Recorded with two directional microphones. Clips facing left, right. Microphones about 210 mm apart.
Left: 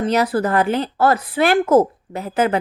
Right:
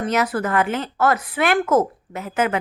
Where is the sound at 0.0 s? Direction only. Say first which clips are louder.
Left 3 dB; 30° left (ahead or behind).